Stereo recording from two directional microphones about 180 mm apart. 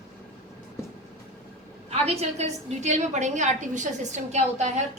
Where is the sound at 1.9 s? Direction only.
35° right (ahead or behind).